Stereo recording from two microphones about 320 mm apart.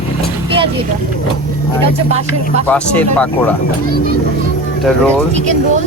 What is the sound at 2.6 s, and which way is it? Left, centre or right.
Speech, centre.